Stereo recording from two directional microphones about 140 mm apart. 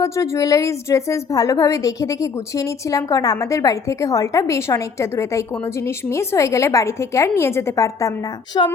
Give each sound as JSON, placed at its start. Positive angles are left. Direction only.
{"t": 0.0, "sound": "a woman's voice", "side_deg": 25}
{"t": 8.5, "sound": "a woman's voice", "side_deg": 35}